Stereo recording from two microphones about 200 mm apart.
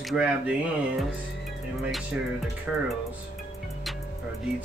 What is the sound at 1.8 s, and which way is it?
Music, centre (ahead or behind).